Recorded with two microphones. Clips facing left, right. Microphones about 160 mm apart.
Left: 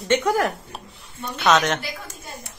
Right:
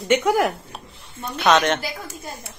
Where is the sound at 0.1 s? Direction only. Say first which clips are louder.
Right 2 dB; 10° right (ahead or behind).